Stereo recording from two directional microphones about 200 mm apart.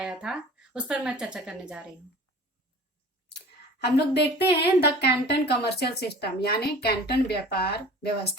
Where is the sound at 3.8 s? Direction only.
55° left (ahead or behind).